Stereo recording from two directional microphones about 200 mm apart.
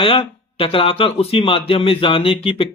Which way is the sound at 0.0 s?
25° left (ahead or behind).